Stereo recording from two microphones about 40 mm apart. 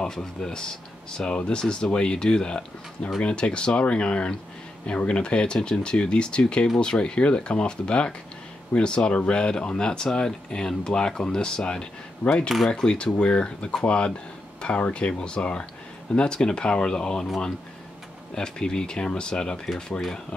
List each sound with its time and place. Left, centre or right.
0.0 s speech: centre
18.3 s speech: centre